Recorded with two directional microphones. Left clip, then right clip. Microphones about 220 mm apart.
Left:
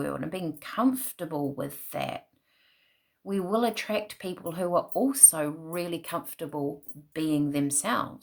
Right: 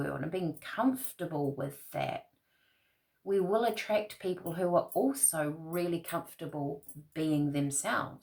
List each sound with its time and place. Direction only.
0.0 s speech: 50° left (ahead or behind)
3.2 s speech: 50° left (ahead or behind)